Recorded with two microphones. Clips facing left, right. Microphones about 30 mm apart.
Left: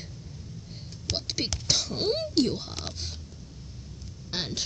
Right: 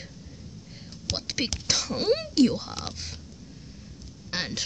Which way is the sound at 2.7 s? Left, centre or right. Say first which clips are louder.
Right 2 dB; right.